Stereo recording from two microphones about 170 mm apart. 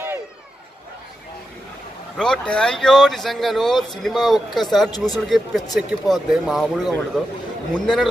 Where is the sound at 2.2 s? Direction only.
5° left (ahead or behind).